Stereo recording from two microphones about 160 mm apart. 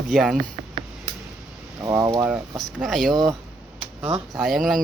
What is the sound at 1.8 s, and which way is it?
Speech, 20° right (ahead or behind).